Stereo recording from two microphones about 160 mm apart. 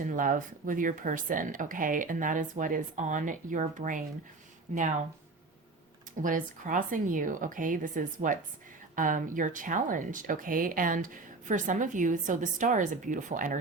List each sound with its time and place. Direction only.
0.0 s speech: 55° right (ahead or behind)
6.2 s speech: 55° right (ahead or behind)